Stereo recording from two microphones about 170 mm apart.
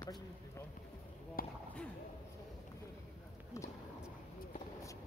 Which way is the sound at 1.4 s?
55° left (ahead or behind).